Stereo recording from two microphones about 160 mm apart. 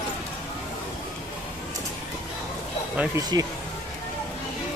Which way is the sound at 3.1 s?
25° right (ahead or behind).